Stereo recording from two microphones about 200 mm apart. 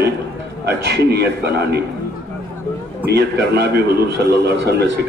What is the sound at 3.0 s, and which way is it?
A man's voice, 60° right (ahead or behind).